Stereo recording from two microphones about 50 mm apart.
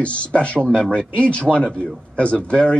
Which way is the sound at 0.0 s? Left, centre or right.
Left.